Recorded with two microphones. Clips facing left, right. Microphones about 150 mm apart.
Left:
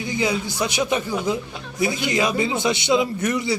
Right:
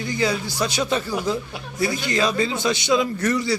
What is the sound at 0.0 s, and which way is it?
A man's voice, 15° left (ahead or behind).